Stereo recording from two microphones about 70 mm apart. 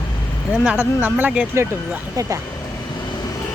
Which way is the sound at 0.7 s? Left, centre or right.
Right.